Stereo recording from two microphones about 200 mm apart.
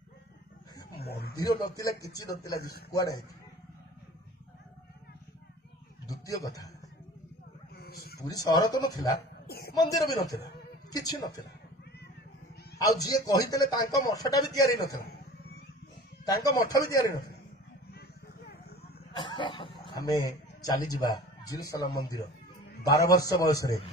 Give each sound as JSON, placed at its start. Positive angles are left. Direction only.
{"t": 0.9, "sound": "speech", "side_deg": 50}
{"t": 1.3, "sound": "a man's voice", "side_deg": 20}
{"t": 6.0, "sound": "a man's voice", "side_deg": 15}
{"t": 7.7, "sound": "a sound", "side_deg": 50}
{"t": 8.2, "sound": "a man's voice", "side_deg": 20}
{"t": 9.5, "sound": "speech", "side_deg": 50}
{"t": 9.8, "sound": "a man's voice", "side_deg": 20}
{"t": 12.7, "sound": "a man's voice", "side_deg": 20}
{"t": 16.4, "sound": "a man's voice", "side_deg": 15}
{"t": 17.1, "sound": "a man's voice", "side_deg": 50}
{"t": 19.1, "sound": "chuckle", "side_deg": 25}
{"t": 21.0, "sound": "a man's voice", "side_deg": 15}